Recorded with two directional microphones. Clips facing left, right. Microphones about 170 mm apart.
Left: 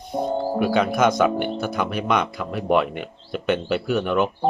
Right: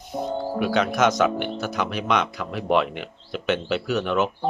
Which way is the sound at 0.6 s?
Centre (ahead or behind).